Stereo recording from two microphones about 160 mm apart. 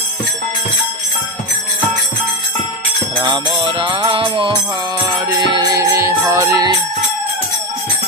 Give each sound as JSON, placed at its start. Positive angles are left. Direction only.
{"t": 3.2, "sound": "jingle bell", "side_deg": -20}
{"t": 3.6, "sound": "music", "side_deg": -35}
{"t": 5.5, "sound": "jingle bell", "side_deg": -25}